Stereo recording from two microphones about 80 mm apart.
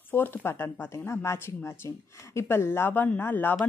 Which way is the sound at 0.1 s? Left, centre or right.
Left.